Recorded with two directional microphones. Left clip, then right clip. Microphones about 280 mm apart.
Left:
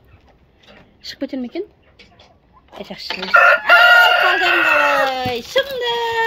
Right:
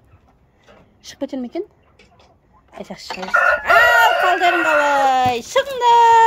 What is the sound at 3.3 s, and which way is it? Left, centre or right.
Chicken, centre.